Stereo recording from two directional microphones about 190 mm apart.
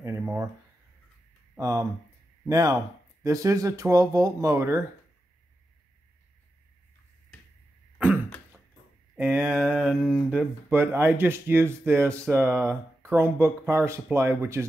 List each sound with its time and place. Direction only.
0.0 s speech: 10° right (ahead or behind)
1.6 s speech: 15° right (ahead or behind)
9.1 s speech: 10° right (ahead or behind)